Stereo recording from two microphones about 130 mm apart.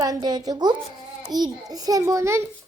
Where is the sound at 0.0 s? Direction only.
30° right (ahead or behind).